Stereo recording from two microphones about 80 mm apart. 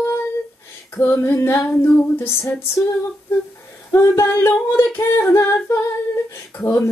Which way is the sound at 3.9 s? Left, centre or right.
Left.